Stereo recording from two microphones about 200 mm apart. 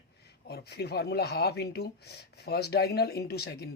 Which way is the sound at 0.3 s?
55° left (ahead or behind).